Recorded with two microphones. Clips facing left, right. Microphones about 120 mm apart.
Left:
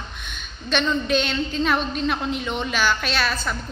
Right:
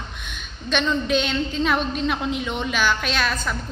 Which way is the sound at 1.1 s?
5° right (ahead or behind).